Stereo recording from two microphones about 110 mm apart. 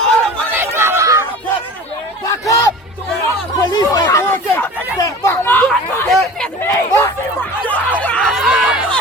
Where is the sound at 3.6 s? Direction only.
35° left (ahead or behind).